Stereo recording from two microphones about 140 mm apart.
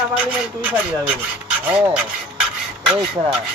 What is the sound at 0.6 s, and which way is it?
Speech, 10° right (ahead or behind).